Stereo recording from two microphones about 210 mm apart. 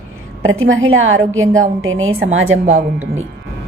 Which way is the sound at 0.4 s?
70° right (ahead or behind).